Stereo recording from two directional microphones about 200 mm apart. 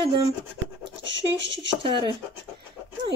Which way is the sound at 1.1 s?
65° right (ahead or behind).